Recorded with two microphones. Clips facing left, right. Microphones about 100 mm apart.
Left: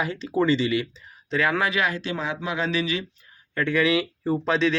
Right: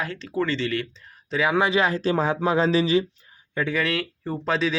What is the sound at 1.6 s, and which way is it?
A man's voice, 25° right (ahead or behind).